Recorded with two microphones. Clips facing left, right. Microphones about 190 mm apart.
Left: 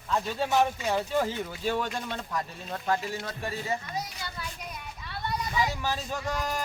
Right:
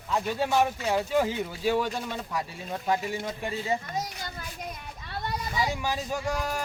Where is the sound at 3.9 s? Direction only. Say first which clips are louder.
Right 2 dB; 45° right (ahead or behind).